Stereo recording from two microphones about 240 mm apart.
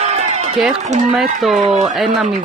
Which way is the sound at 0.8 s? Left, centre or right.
Right.